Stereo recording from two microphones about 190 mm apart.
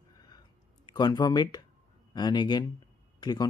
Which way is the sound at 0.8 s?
20° left (ahead or behind).